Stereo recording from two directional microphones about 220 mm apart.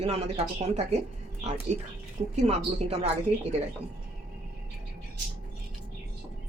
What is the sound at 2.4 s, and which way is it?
Speech, 30° right (ahead or behind).